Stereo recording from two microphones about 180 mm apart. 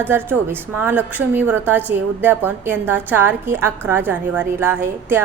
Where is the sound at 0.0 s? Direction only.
10° right (ahead or behind).